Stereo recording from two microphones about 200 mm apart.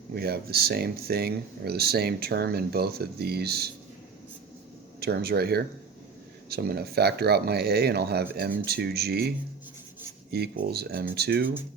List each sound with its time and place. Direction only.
0.1 s speech: 50° right (ahead or behind)
4.9 s speech: 50° right (ahead or behind)
10.3 s speech: 55° right (ahead or behind)